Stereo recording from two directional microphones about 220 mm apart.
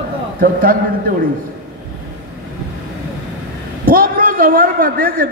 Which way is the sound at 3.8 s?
40° right (ahead or behind).